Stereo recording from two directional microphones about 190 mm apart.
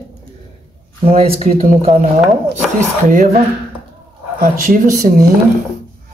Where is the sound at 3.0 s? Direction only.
45° right (ahead or behind).